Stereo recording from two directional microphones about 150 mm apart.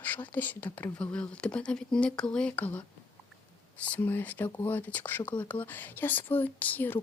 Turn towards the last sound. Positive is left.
turn(degrees=10)  # may be behind; listen again after turning